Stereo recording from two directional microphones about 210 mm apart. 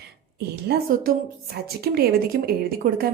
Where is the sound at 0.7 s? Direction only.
50° right (ahead or behind).